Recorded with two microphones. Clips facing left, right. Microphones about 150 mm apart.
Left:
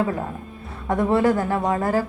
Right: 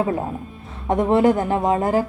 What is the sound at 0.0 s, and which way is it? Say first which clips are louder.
A woman's voice: right 2 dB; 25° right (ahead or behind).